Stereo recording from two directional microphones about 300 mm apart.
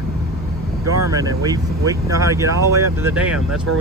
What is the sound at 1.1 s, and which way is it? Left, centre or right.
Speech, centre.